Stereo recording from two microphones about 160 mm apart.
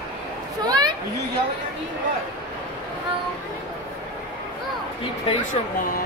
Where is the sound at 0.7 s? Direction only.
25° right (ahead or behind).